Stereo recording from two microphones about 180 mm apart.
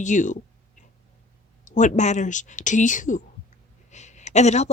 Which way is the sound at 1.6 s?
40° left (ahead or behind).